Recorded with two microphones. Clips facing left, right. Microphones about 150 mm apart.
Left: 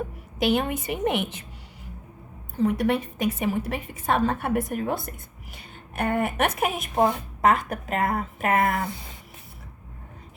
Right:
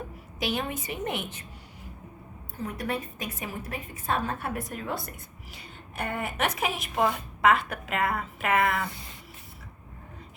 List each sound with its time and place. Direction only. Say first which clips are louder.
0.3 s a woman's voice: left 7 dB; 60° left (ahead or behind)
2.6 s a woman's voice: left 9 dB; 75° left (ahead or behind); by 6.9 s 50° left (ahead or behind)
6.9 s a woman's voice: left 4 dB; 35° left (ahead or behind)